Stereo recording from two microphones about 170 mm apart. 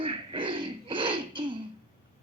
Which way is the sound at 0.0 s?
30° right (ahead or behind).